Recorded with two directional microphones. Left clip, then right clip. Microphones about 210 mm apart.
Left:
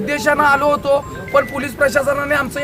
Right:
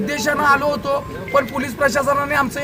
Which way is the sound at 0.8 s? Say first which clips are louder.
Left 5 dB; 25° left (ahead or behind).